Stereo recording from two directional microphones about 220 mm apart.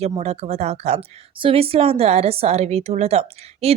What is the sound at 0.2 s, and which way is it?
A woman's voice, 30° right (ahead or behind).